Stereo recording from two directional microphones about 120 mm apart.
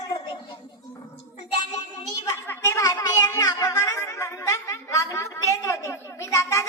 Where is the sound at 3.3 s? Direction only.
30° left (ahead or behind).